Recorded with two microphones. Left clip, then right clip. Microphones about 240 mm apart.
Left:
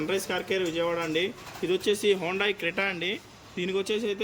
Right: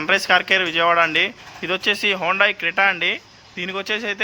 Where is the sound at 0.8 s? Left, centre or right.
Right.